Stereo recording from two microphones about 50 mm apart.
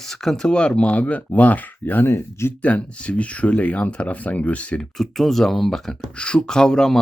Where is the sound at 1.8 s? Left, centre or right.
Left.